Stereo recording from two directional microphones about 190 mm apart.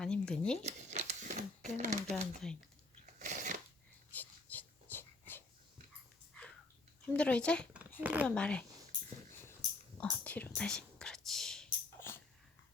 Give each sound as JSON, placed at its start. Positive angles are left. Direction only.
{"t": 0.0, "sound": "a sound", "side_deg": 5}
{"t": 0.6, "sound": "crumpling", "side_deg": -35}
{"t": 3.2, "sound": "shuffling cards", "side_deg": -40}
{"t": 4.1, "sound": "dog", "side_deg": 10}
{"t": 7.0, "sound": "speech", "side_deg": 5}
{"t": 8.0, "sound": "speech", "side_deg": -10}
{"t": 8.4, "sound": "speech", "side_deg": 5}
{"t": 10.0, "sound": "whispering", "side_deg": 5}
{"t": 11.9, "sound": "dog", "side_deg": 15}